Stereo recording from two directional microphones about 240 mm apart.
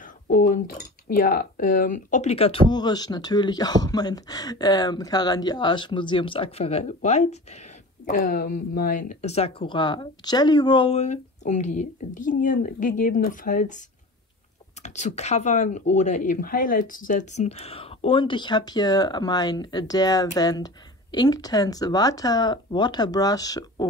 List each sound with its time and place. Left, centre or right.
0.0 s speech: left; by 23.9 s centre